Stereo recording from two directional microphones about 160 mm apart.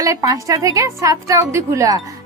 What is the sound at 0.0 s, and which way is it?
A woman's voice, 20° right (ahead or behind).